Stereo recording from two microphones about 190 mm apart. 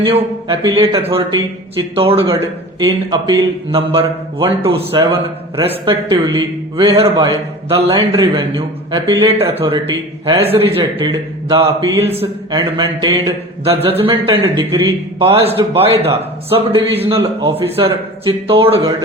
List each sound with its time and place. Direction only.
0.0 s speech: 30° right (ahead or behind)
2.0 s speech: 30° right (ahead or behind)
7.9 s a man's voice: 15° right (ahead or behind)